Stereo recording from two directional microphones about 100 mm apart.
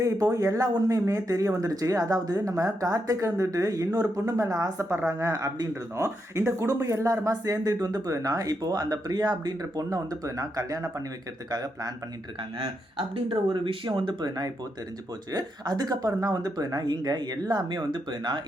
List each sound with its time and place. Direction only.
0.0 s speech: 35° right (ahead or behind)
12.5 s speech: 60° right (ahead or behind)